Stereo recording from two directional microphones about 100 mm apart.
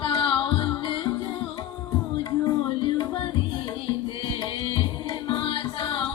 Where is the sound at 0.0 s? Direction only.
55° left (ahead or behind).